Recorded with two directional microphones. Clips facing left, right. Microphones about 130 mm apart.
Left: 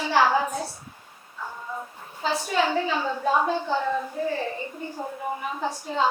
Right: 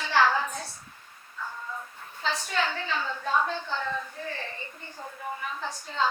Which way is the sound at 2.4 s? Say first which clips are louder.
Left 9 dB; 10° left (ahead or behind).